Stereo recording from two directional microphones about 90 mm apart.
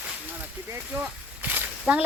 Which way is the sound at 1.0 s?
20° right (ahead or behind).